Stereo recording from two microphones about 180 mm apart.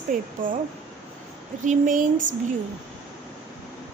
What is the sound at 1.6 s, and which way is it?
Speech, 45° right (ahead or behind).